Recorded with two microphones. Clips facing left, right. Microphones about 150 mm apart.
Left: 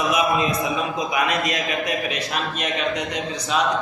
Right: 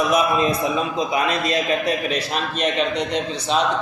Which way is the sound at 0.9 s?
30° right (ahead or behind).